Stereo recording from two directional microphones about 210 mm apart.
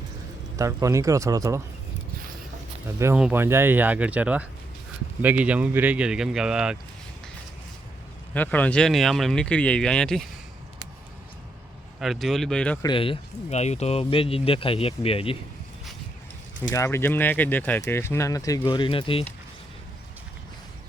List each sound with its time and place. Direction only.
0.5 s speech: 15° right (ahead or behind)
3.0 s speech: 10° right (ahead or behind)
8.3 s speech: 5° left (ahead or behind)
11.9 s speech: centre (ahead or behind)
12.8 s speech: 25° left (ahead or behind)
16.7 s speech: 15° left (ahead or behind)